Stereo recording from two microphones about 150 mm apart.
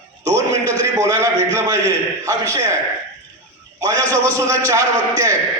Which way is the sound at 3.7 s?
20° right (ahead or behind).